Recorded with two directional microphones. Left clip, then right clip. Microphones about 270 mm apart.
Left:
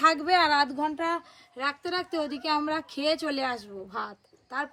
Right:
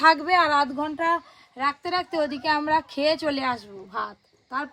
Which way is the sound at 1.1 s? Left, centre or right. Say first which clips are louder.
Right 6 dB; centre.